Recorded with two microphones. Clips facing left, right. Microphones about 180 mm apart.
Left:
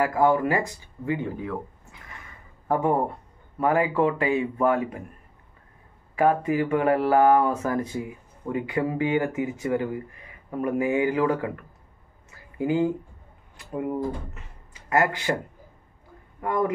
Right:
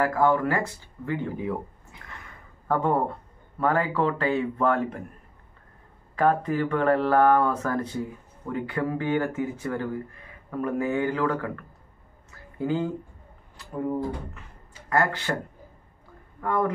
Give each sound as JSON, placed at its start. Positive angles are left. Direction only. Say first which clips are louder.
{"t": 0.0, "sound": "speech", "louder": "left 1 dB", "side_deg": 15}
{"t": 2.7, "sound": "speech", "louder": "left 1 dB", "side_deg": 15}
{"t": 6.1, "sound": "speech", "louder": "left 1 dB", "side_deg": 10}
{"t": 16.3, "sound": "speech", "louder": "left 1 dB", "side_deg": 15}